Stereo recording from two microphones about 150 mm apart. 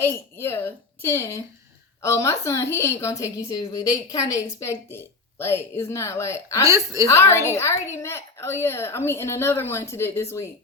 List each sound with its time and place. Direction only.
0.0 s a woman's voice: 15° left (ahead or behind)
6.7 s a woman's voice: 20° right (ahead or behind)
7.1 s a woman's voice: 20° left (ahead or behind)